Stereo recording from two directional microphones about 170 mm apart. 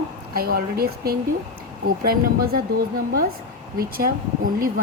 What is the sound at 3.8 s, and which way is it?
Speech, 60° right (ahead or behind).